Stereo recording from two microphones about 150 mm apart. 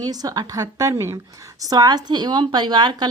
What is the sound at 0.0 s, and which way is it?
A woman's voice, 25° right (ahead or behind).